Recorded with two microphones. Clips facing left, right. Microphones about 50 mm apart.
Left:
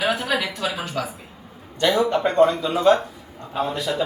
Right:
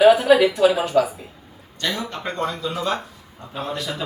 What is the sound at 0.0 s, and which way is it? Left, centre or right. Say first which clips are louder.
A woman's voice: right 10 dB; centre.